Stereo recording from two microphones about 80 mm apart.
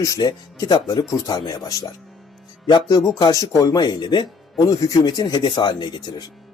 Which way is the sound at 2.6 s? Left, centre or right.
Left.